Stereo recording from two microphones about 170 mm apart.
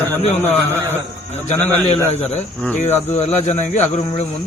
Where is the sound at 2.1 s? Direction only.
40° left (ahead or behind).